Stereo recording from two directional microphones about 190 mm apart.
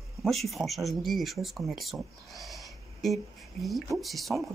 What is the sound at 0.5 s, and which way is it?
Speech, centre (ahead or behind).